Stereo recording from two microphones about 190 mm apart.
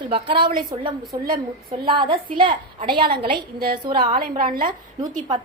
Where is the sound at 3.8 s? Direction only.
25° right (ahead or behind).